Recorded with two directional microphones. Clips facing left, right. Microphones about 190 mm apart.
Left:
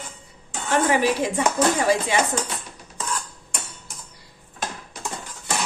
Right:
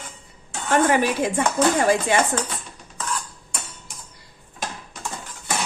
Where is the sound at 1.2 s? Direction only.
55° right (ahead or behind).